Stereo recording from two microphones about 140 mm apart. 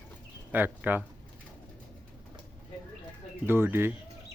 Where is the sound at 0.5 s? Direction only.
15° right (ahead or behind).